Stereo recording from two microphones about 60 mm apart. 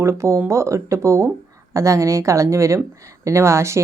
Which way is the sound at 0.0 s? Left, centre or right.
Right.